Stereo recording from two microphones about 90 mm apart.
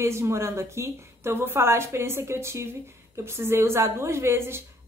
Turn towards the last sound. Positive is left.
turn(degrees=-30)  # may be behind; listen again after turning